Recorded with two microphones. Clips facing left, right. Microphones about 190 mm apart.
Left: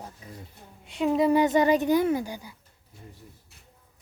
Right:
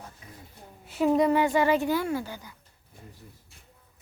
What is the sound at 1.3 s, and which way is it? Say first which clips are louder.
A woman's voice: left 2 dB; 20° left (ahead or behind).